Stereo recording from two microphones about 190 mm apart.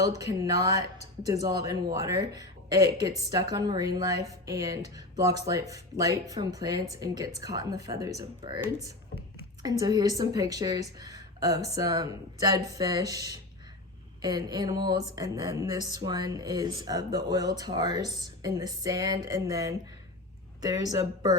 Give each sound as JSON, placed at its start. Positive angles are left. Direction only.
{"t": 0.2, "sound": "speech", "side_deg": -20}